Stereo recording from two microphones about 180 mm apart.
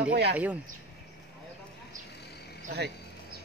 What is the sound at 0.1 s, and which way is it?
Speech, 60° right (ahead or behind).